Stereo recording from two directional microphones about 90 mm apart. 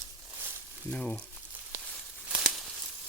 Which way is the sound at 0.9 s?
10° left (ahead or behind).